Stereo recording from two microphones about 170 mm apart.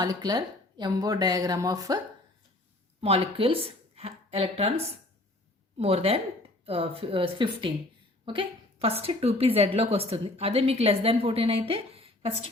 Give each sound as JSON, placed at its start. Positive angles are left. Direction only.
{"t": 0.0, "sound": "speech", "side_deg": -20}
{"t": 3.0, "sound": "speech", "side_deg": -35}
{"t": 5.7, "sound": "a woman's voice", "side_deg": -35}